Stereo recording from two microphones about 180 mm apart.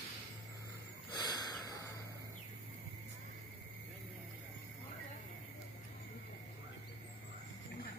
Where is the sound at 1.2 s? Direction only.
20° left (ahead or behind).